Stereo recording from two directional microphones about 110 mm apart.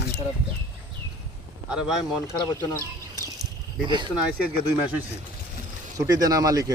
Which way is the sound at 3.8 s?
45° right (ahead or behind).